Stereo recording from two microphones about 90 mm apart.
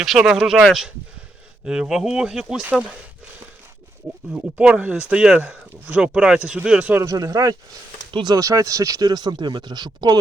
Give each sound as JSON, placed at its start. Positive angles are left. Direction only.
{"t": 0.0, "sound": "speech", "side_deg": -5}
{"t": 4.3, "sound": "speech", "side_deg": -15}
{"t": 7.0, "sound": "speech", "side_deg": -40}
{"t": 8.1, "sound": "speech", "side_deg": -55}
{"t": 8.4, "sound": "speech", "side_deg": -40}